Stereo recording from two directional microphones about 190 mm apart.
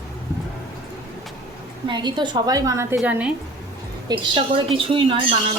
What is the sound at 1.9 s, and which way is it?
A woman's voice, 25° right (ahead or behind).